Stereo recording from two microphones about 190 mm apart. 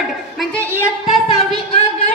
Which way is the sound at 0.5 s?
15° right (ahead or behind).